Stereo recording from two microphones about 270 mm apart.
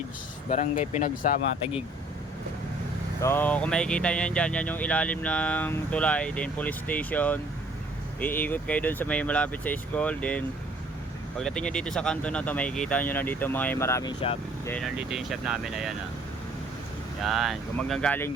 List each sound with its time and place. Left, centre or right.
0.5 s speech: left
3.2 s speech: centre
14.7 s speech: centre
17.2 s speech: centre